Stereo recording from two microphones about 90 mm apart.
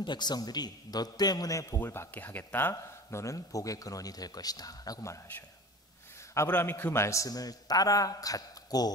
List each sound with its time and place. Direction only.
0.0 s a man's voice: 55° left (ahead or behind); by 1.8 s 40° left (ahead or behind)
1.8 s speech: 25° left (ahead or behind)
2.7 s speech: 30° left (ahead or behind)
6.3 s a man's voice: 25° left (ahead or behind); by 8.9 s 45° left (ahead or behind)